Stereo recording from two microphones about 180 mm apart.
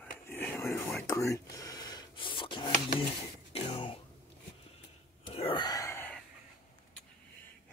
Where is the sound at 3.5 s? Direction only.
30° left (ahead or behind).